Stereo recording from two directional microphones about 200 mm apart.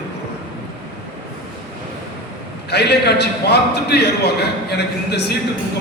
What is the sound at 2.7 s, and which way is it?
A man's voice, 55° left (ahead or behind).